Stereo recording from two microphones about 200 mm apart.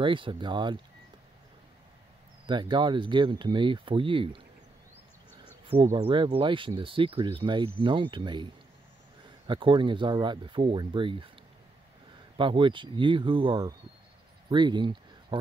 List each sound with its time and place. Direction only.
0.0 s speech: 25° right (ahead or behind)
2.4 s speech: 25° right (ahead or behind)
5.9 s speech: 25° right (ahead or behind)
9.5 s speech: 25° right (ahead or behind)
12.4 s speech: 25° right (ahead or behind)
14.5 s a sound: 25° right (ahead or behind)